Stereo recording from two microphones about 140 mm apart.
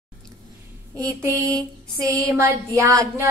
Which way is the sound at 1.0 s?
25° right (ahead or behind).